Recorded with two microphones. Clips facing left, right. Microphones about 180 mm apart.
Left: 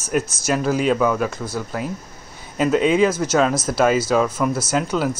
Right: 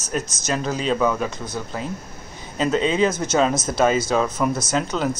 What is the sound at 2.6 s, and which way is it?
Speech, 10° left (ahead or behind).